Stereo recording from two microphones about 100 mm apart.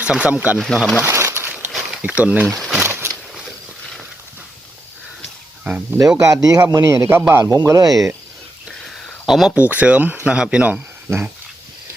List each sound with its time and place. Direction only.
0.0 s speech: 15° right (ahead or behind)
0.6 s speech: 5° left (ahead or behind)
1.0 s a sound: 25° right (ahead or behind)
1.7 s a sound: centre (ahead or behind)
2.0 s speech: 15° right (ahead or behind)
2.5 s speech: centre (ahead or behind)
2.8 s a sound: 25° right (ahead or behind)
5.6 s speech: 15° right (ahead or behind)
6.1 s a man's voice: 35° right (ahead or behind)
9.2 s speech: centre (ahead or behind)
9.6 s speech: 15° right (ahead or behind)